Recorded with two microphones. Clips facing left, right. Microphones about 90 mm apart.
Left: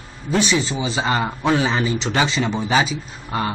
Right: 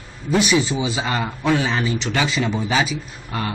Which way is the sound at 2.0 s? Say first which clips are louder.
Left 2 dB; 25° left (ahead or behind).